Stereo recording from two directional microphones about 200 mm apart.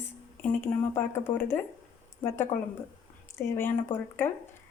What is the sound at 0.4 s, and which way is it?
Speech, 10° left (ahead or behind).